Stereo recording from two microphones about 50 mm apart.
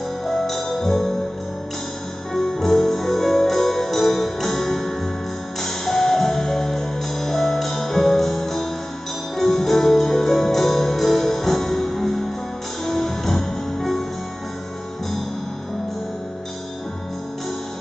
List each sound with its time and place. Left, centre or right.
0.3 s music: centre
2.3 s music: centre